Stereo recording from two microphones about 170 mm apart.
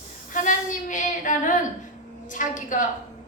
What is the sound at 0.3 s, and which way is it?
Female singing, 50° left (ahead or behind).